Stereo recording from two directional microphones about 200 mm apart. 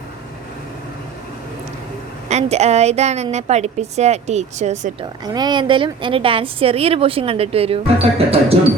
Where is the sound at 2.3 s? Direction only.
35° right (ahead or behind).